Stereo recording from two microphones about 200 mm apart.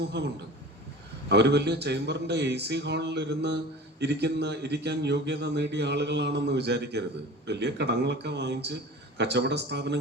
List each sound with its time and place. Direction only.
0.1 s a man's voice: 60° right (ahead or behind)